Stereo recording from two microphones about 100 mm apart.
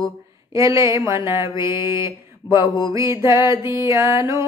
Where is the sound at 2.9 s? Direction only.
30° right (ahead or behind).